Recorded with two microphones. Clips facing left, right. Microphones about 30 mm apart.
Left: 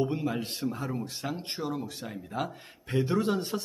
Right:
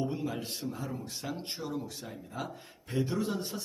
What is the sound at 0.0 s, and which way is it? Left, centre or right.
Speech, left.